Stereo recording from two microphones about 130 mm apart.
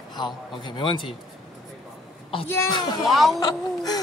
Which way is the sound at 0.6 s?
35° left (ahead or behind).